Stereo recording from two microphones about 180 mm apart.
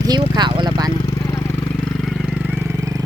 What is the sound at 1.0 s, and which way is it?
Vehicle, 20° left (ahead or behind).